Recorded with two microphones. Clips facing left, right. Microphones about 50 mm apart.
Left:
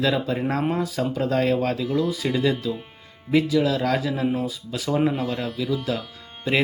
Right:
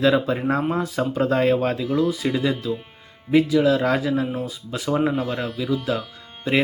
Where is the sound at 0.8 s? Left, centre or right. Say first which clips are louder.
Right 2 dB; right.